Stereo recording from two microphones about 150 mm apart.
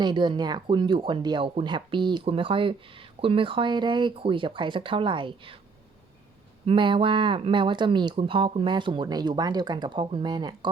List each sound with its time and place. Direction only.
0.0 s speech: 30° right (ahead or behind)
6.7 s speech: 35° right (ahead or behind)